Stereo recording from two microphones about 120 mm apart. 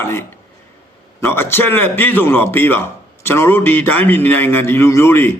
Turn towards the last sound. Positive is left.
turn(degrees=20)  # may be behind; listen again after turning